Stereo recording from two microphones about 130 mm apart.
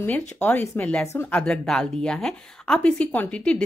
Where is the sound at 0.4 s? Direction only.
10° left (ahead or behind).